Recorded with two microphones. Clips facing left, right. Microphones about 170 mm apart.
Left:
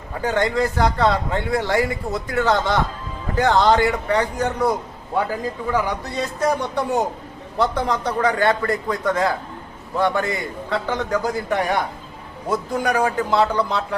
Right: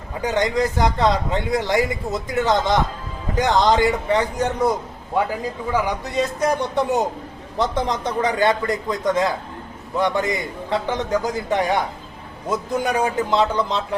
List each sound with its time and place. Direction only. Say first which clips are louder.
0.2 s a man's voice: even; 15° right (ahead or behind)